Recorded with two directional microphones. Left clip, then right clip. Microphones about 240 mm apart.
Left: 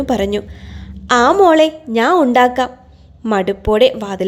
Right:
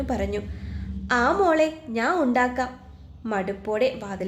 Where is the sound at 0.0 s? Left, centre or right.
Left.